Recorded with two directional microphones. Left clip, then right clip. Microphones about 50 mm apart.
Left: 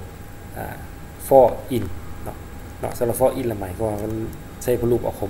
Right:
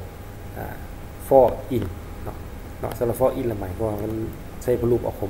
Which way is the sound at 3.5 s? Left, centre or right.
Left.